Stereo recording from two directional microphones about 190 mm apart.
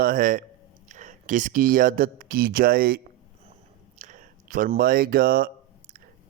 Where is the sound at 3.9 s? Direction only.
40° right (ahead or behind).